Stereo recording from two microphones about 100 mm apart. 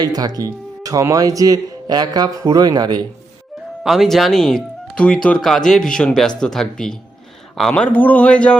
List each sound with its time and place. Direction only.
0.0 s speech: 40° right (ahead or behind)
3.8 s speech: centre (ahead or behind)
7.7 s a man's voice: 15° left (ahead or behind)